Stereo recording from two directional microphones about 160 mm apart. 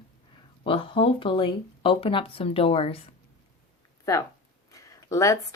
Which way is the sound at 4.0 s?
20° left (ahead or behind).